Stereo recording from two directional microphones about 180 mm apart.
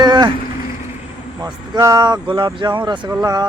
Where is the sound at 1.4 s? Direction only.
20° right (ahead or behind).